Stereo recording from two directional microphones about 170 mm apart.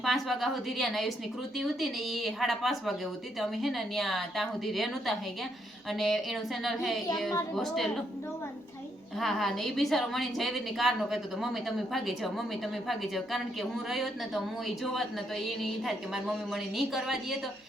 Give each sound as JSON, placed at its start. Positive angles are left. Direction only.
{"t": 0.0, "sound": "a woman's voice", "side_deg": 0}
{"t": 9.1, "sound": "a woman's voice", "side_deg": 0}